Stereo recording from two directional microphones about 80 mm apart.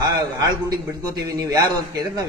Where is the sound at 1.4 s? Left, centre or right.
Right.